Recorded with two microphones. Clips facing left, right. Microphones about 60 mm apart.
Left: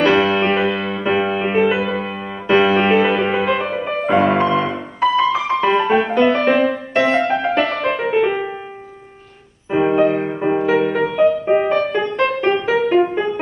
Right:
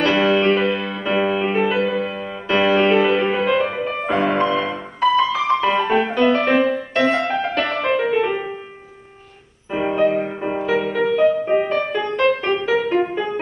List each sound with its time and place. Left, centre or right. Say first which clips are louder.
0.0 s music: left 2 dB; centre
3.6 s music: left 2 dB; centre
4.1 s music: left 4 dB; centre
4.6 s music: left 1 dB; centre
7.6 s music: even; centre
9.7 s music: left 3 dB; left
10.6 s music: left 1 dB; centre